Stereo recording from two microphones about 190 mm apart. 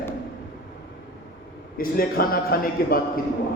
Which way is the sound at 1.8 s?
50° left (ahead or behind).